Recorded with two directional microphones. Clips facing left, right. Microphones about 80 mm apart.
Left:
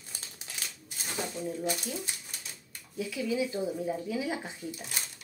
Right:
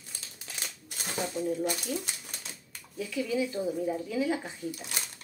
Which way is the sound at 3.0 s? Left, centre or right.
Centre.